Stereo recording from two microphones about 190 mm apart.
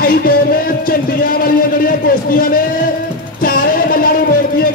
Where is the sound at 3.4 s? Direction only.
50° left (ahead or behind).